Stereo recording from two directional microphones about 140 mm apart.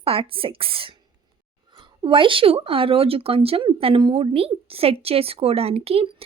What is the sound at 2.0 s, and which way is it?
Speech, 35° right (ahead or behind).